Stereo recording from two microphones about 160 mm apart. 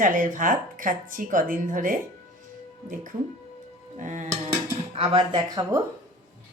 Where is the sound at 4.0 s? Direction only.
50° right (ahead or behind).